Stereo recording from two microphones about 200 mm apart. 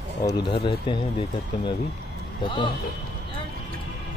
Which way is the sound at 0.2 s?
20° left (ahead or behind).